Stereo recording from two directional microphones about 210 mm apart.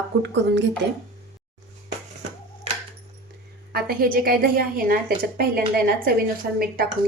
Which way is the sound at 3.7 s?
45° right (ahead or behind).